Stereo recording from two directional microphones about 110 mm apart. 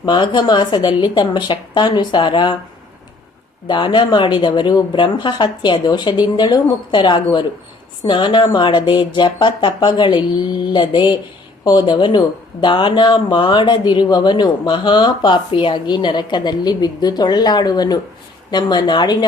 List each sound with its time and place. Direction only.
0.0 s speech: 45° left (ahead or behind)
3.7 s speech: 45° left (ahead or behind)